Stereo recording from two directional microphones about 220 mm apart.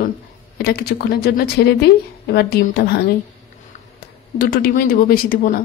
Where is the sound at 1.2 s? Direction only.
45° left (ahead or behind).